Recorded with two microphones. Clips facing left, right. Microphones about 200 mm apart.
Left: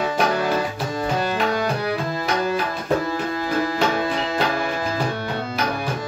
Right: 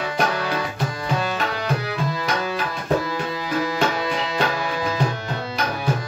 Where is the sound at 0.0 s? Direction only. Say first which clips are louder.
Left 3 dB; 50° left (ahead or behind).